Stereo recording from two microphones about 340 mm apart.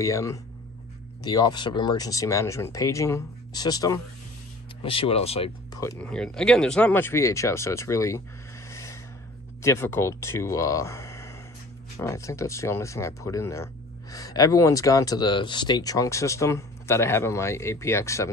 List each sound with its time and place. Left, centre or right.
0.0 s speech: centre
8.6 s a sound: centre
9.6 s speech: centre